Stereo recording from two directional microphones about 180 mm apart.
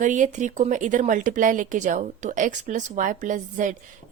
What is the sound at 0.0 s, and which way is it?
A woman's voice, 45° right (ahead or behind).